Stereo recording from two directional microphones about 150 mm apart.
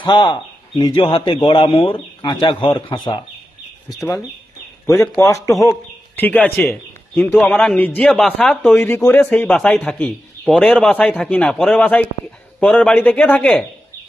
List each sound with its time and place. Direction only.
0.0 s speech: 30° left (ahead or behind)
3.8 s speech: 20° left (ahead or behind)
5.2 s a man's voice: 20° left (ahead or behind)